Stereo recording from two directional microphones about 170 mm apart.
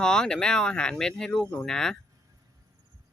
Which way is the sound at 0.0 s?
5° left (ahead or behind).